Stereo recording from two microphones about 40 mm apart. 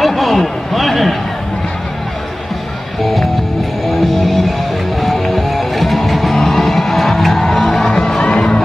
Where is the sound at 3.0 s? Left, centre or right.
Centre.